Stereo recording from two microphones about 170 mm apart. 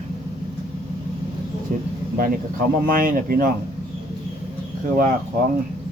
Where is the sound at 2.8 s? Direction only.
55° right (ahead or behind).